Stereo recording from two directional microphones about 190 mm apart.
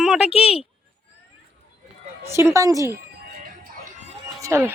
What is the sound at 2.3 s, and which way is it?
Speech, 15° right (ahead or behind).